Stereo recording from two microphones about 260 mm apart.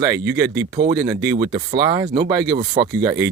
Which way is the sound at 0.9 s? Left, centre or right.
Centre.